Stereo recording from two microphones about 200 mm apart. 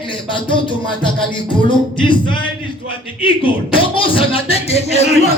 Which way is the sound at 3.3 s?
25° left (ahead or behind).